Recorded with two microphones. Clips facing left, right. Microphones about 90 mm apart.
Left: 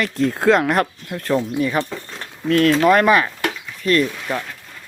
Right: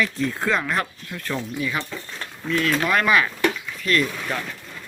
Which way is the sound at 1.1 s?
40° left (ahead or behind).